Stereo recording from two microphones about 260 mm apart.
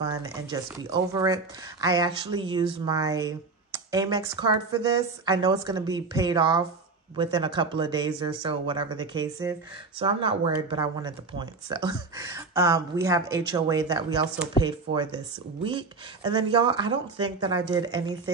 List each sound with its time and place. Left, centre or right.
0.0 s speech: centre